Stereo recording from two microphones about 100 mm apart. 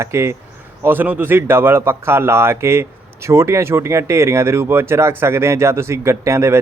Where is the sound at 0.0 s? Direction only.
30° right (ahead or behind).